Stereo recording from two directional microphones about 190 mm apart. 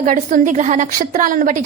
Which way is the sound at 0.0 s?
45° right (ahead or behind).